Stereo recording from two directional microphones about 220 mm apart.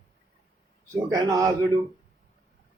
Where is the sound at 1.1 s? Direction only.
15° right (ahead or behind).